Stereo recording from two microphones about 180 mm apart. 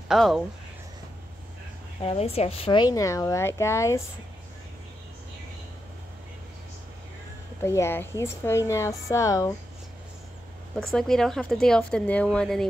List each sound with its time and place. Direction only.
0.1 s speech: centre (ahead or behind)
2.0 s speech: 35° left (ahead or behind); by 4.0 s 15° left (ahead or behind)
7.6 s speech: 15° left (ahead or behind)
10.8 s speech: centre (ahead or behind)